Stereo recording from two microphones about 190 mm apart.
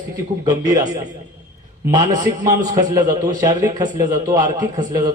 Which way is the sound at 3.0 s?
20° right (ahead or behind).